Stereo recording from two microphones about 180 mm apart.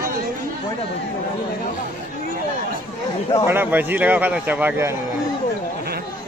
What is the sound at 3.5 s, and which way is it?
Speech, 10° right (ahead or behind).